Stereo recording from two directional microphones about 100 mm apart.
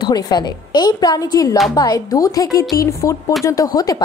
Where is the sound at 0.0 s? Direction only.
45° left (ahead or behind).